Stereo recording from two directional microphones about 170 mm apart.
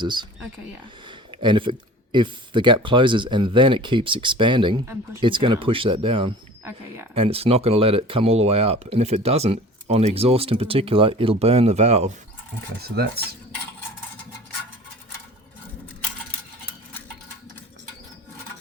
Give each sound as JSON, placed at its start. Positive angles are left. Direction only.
{"t": 0.0, "sound": "speech", "side_deg": -25}
{"t": 1.4, "sound": "speech", "side_deg": -30}
{"t": 6.7, "sound": "speech", "side_deg": -15}
{"t": 7.1, "sound": "speech", "side_deg": -35}